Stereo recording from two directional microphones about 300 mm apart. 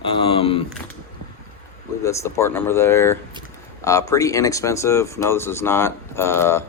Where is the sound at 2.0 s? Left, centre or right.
Centre.